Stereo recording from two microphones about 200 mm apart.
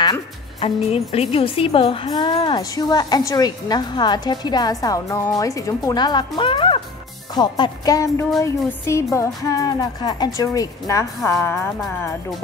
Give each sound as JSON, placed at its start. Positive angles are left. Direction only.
{"t": 0.0, "sound": "music", "side_deg": 20}
{"t": 0.8, "sound": "speech", "side_deg": 30}
{"t": 8.4, "sound": "music", "side_deg": 15}